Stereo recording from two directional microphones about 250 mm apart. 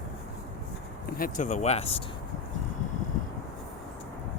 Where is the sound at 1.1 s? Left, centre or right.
Left.